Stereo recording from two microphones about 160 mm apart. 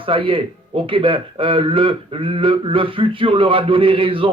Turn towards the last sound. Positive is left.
turn(degrees=-35)  # may be behind; listen again after turning